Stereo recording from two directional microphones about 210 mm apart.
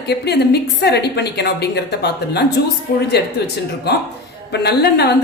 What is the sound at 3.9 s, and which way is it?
A woman's voice, 50° left (ahead or behind).